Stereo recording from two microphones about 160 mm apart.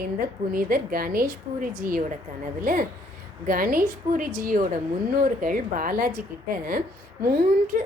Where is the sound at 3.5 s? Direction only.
60° right (ahead or behind).